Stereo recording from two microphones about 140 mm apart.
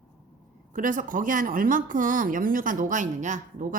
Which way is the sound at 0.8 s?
70° right (ahead or behind).